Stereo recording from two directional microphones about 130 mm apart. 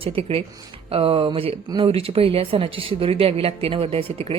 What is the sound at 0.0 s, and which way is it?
A woman's voice, 45° right (ahead or behind).